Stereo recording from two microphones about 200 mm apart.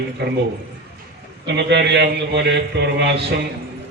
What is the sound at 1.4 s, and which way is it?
A man's voice, 60° right (ahead or behind).